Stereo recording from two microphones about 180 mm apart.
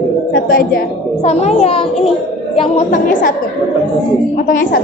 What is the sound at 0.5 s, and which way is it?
Speech, 55° left (ahead or behind).